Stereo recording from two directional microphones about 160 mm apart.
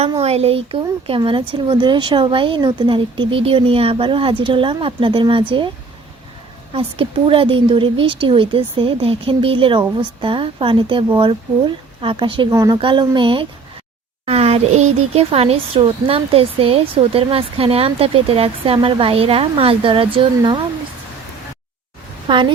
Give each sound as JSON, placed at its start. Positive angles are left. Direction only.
{"t": 0.2, "sound": "speech", "side_deg": -40}
{"t": 6.7, "sound": "speech", "side_deg": -35}
{"t": 12.5, "sound": "speech", "side_deg": -20}
{"t": 22.3, "sound": "speech", "side_deg": -30}